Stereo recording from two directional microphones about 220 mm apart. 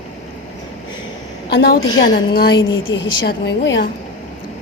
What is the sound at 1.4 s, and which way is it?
A woman's voice, 45° left (ahead or behind).